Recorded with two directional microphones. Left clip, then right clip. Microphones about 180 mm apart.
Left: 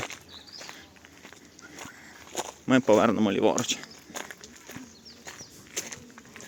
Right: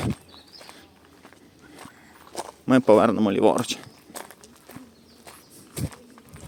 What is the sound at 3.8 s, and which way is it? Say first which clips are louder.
Walk: left 1 dB; 5° right (ahead or behind).